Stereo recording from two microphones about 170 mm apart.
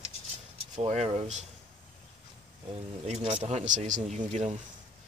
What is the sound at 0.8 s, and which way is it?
Speech, 40° right (ahead or behind).